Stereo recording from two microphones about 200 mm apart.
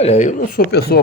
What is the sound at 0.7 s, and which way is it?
Speech, 55° left (ahead or behind).